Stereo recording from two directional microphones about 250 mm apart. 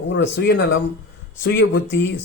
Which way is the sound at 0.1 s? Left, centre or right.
Left.